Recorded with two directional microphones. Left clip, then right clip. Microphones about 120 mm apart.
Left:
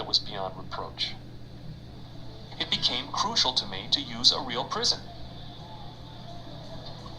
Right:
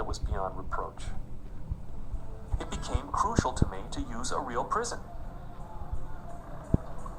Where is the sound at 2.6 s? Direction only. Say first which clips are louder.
Left 11 dB; 5° left (ahead or behind).